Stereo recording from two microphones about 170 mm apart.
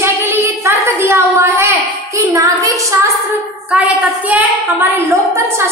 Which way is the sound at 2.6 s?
20° right (ahead or behind).